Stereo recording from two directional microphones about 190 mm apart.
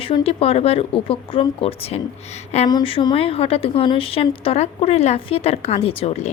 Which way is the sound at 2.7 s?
25° left (ahead or behind).